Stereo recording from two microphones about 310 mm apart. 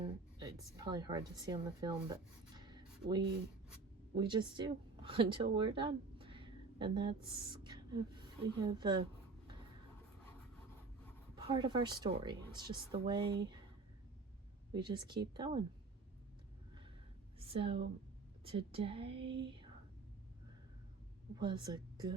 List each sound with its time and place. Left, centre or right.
0.3 s speech: centre
2.6 s writing: centre
4.1 s a woman's voice: centre
11.3 s speech: centre
14.7 s speech: centre
17.4 s a woman's voice: centre
21.3 s speech: centre